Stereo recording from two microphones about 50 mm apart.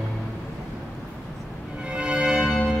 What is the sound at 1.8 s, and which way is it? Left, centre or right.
Music, centre.